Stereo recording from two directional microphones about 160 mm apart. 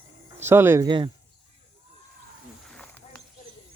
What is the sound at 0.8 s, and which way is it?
Speech, 30° right (ahead or behind).